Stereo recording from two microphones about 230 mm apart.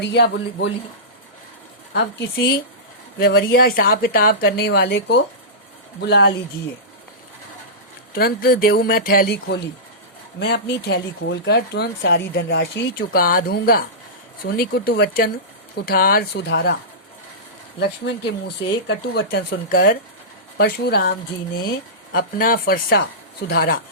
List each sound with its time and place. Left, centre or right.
0.0 s speech: left
1.9 s a woman's voice: left
8.1 s a woman's voice: left
12.8 s a woman's voice: left
17.7 s a woman's voice: left